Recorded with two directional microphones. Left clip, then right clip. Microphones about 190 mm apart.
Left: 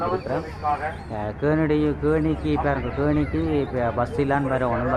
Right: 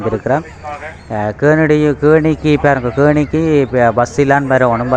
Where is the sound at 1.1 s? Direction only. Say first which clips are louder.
Right 13 dB; 30° right (ahead or behind).